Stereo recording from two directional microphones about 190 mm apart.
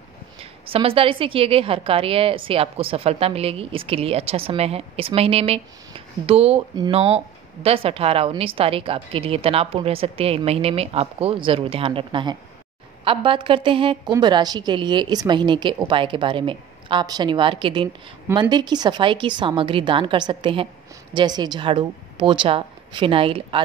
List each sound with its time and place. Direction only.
0.4 s a woman's voice: 30° right (ahead or behind)